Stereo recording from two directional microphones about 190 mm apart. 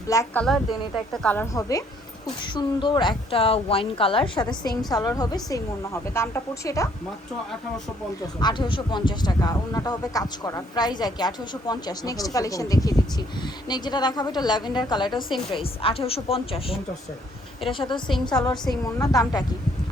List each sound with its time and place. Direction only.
0.1 s a woman's voice: 15° left (ahead or behind)
0.4 s speech: centre (ahead or behind)
2.4 s a woman's voice: 25° left (ahead or behind)
8.4 s speech: 25° left (ahead or behind)